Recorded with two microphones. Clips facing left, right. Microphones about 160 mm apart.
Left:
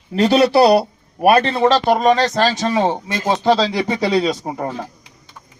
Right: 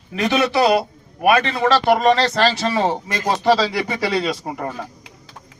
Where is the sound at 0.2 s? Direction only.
30° left (ahead or behind).